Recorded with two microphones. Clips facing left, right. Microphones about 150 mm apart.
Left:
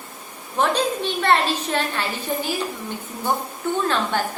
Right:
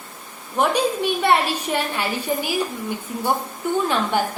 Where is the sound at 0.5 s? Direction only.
10° right (ahead or behind).